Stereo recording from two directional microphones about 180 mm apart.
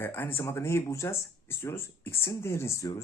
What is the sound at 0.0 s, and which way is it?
Speech, 10° left (ahead or behind).